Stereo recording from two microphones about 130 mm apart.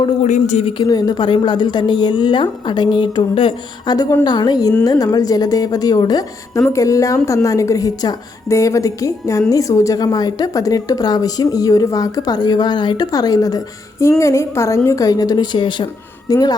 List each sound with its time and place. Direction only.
0.2 s speech: 65° left (ahead or behind)
0.6 s a woman's voice: 35° left (ahead or behind)